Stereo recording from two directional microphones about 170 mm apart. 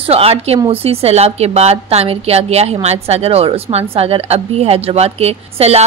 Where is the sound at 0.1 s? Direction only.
35° right (ahead or behind).